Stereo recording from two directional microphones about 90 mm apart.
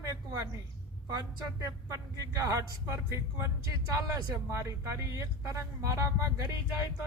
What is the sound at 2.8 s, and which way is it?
Speech, 30° right (ahead or behind).